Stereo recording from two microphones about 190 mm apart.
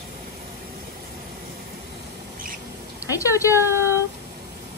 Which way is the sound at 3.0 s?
15° left (ahead or behind).